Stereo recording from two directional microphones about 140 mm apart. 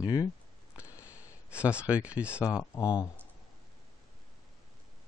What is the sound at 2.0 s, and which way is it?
Speech, 10° right (ahead or behind).